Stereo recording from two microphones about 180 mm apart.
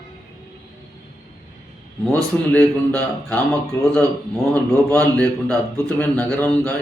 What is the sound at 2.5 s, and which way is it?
A man's voice, 10° left (ahead or behind).